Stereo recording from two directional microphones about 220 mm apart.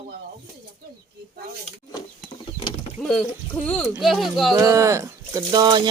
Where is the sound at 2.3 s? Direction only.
20° left (ahead or behind).